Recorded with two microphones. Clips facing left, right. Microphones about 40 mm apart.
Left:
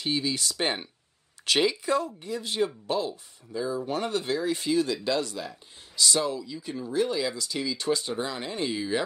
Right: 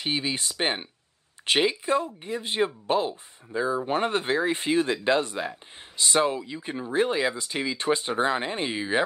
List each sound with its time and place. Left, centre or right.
0.0 s speech: right